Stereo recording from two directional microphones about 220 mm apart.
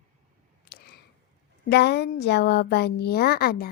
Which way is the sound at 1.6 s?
50° left (ahead or behind).